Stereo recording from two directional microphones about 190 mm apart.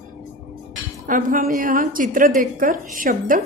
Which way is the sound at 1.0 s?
45° right (ahead or behind).